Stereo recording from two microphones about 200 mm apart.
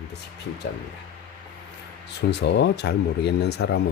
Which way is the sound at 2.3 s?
60° left (ahead or behind).